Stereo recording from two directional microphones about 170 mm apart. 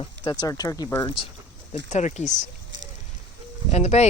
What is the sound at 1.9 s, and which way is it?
Speech, 45° left (ahead or behind).